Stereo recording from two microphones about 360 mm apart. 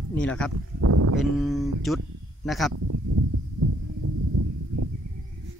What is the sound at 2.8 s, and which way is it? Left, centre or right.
Speech, right.